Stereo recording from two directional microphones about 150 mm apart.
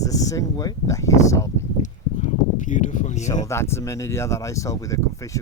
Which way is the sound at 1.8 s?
60° left (ahead or behind).